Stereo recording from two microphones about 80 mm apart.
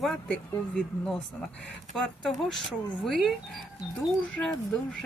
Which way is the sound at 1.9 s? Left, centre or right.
Centre.